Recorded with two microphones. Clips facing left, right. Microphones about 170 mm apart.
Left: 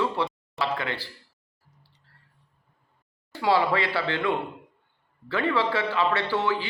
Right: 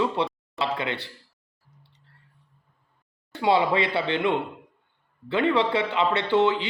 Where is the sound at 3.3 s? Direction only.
20° right (ahead or behind).